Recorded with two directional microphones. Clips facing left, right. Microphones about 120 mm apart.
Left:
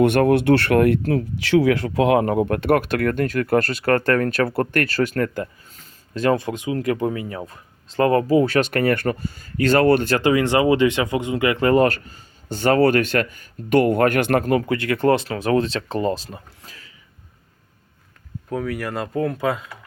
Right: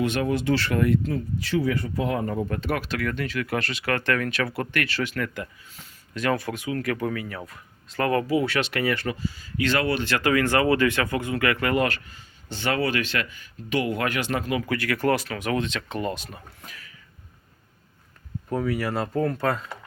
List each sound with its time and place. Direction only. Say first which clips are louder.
0.0 s speech: left 9 dB; 60° left (ahead or behind); by 6.3 s 35° left (ahead or behind)
6.3 s speech: left 5 dB; 20° left (ahead or behind); by 10.2 s 50° left (ahead or behind)
10.2 s speech: left 4 dB; 25° left (ahead or behind); by 14.6 s 50° left (ahead or behind)
14.7 s speech: left 2 dB; 25° left (ahead or behind)
18.4 s speech: even; centre (ahead or behind)